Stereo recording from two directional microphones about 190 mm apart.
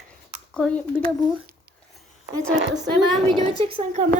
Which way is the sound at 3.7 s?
35° right (ahead or behind).